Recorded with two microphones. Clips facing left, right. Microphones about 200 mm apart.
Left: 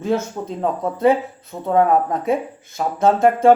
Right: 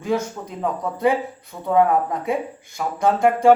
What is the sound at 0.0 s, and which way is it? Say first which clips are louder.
Speech: left 2 dB; 25° left (ahead or behind).